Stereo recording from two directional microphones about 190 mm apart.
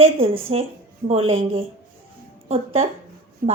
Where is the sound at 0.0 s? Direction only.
30° right (ahead or behind).